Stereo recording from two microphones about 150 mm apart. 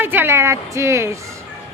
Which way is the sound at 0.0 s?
15° right (ahead or behind).